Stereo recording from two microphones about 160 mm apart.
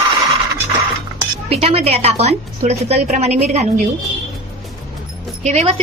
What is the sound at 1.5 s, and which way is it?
A woman's voice, 40° right (ahead or behind).